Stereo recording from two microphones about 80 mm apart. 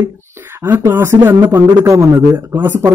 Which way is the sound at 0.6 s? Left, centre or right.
Right.